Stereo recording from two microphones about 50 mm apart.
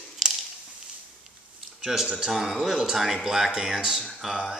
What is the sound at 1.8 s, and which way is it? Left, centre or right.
A man's voice, centre.